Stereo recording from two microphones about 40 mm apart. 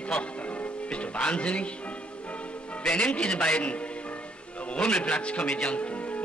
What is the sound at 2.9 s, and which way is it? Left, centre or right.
A man's voice, left.